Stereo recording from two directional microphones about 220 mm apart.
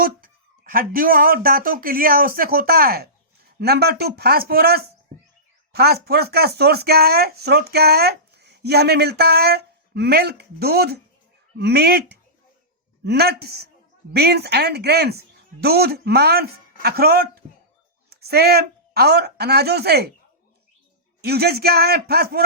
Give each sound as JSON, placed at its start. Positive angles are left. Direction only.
{"t": 0.0, "sound": "speech", "side_deg": -40}
{"t": 13.1, "sound": "a woman's voice", "side_deg": -45}
{"t": 21.2, "sound": "speech", "side_deg": -45}